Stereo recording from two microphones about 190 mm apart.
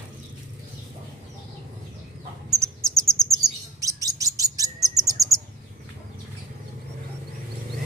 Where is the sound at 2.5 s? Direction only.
15° right (ahead or behind).